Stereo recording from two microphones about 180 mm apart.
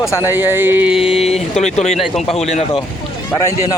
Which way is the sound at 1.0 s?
35° left (ahead or behind).